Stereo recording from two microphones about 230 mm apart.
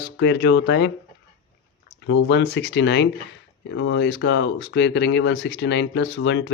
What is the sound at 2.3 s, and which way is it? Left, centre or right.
Speech, left.